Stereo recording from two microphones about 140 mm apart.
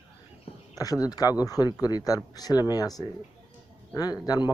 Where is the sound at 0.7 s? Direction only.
25° left (ahead or behind).